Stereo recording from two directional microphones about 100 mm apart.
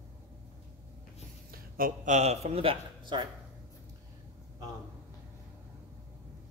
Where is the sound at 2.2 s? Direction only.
85° right; by 3.2 s 50° right (ahead or behind).